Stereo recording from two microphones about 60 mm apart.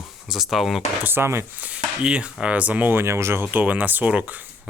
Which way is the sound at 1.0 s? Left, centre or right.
Right.